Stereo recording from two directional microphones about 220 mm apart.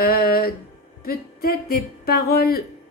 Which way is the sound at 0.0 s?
45° left (ahead or behind).